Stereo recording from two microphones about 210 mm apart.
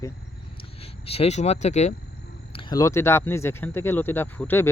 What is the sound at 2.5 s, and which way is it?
Speech, 25° left (ahead or behind).